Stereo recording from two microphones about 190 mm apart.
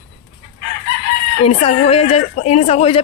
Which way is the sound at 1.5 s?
30° left (ahead or behind).